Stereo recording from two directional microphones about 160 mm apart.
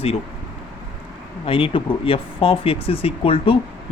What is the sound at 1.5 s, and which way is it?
Speech, 35° left (ahead or behind).